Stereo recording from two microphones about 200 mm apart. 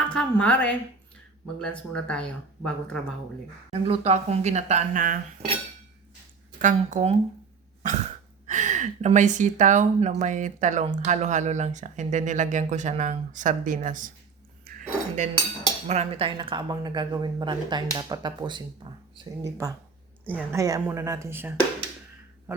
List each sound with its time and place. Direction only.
0.0 s a woman's voice: 5° left (ahead or behind)
3.7 s speech: 30° right (ahead or behind)
6.6 s speech: 40° right (ahead or behind)
8.4 s speech: 35° right (ahead or behind)
14.6 s dishes: 40° right (ahead or behind)
15.9 s a woman's voice: 30° right (ahead or behind); by 21.5 s 10° right (ahead or behind)